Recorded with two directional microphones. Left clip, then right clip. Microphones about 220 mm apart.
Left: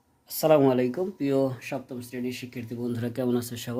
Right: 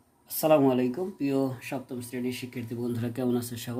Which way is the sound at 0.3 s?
20° left (ahead or behind).